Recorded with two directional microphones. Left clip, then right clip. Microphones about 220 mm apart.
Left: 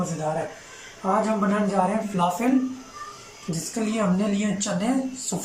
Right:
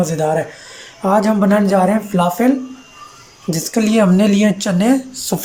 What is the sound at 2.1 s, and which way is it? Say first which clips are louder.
Speech: right 7 dB; 40° right (ahead or behind).